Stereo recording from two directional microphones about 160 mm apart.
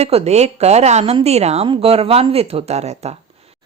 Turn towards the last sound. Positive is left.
turn(degrees=-40)  # may be behind; listen again after turning